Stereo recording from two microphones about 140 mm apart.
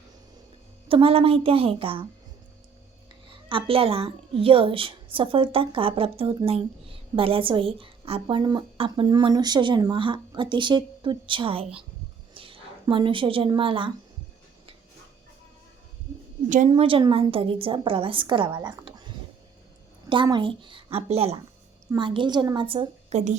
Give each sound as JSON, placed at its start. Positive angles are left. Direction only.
{"t": 0.9, "sound": "a woman's voice", "side_deg": -40}
{"t": 3.5, "sound": "a woman's voice", "side_deg": -40}
{"t": 12.3, "sound": "a sound", "side_deg": -40}
{"t": 12.9, "sound": "a woman's voice", "side_deg": -35}
{"t": 16.6, "sound": "a woman's voice", "side_deg": -40}
{"t": 20.2, "sound": "a woman's voice", "side_deg": -35}
{"t": 21.9, "sound": "a woman's voice", "side_deg": -35}
{"t": 23.1, "sound": "a woman's voice", "side_deg": -55}